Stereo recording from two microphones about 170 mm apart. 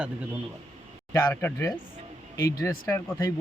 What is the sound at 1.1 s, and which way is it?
Speech, 15° left (ahead or behind).